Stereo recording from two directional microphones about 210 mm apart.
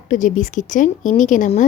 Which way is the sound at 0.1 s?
35° left (ahead or behind).